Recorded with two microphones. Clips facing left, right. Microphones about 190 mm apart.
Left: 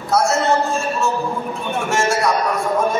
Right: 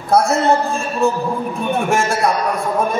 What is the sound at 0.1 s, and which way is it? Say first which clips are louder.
Speech: right 3 dB; 55° right (ahead or behind).